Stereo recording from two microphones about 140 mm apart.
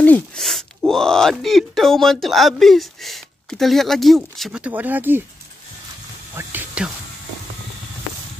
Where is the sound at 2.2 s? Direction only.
Centre (ahead or behind).